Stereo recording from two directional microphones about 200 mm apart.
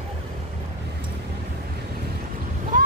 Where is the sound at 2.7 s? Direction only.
40° right (ahead or behind).